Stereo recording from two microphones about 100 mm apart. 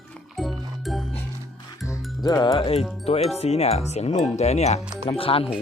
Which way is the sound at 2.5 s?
75° left (ahead or behind).